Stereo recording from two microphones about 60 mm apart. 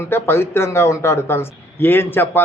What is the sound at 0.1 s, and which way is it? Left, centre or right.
A man's voice, left.